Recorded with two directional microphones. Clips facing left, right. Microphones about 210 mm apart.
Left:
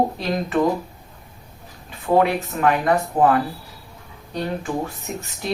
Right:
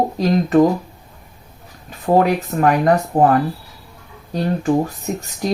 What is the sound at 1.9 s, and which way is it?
Speech, 40° right (ahead or behind).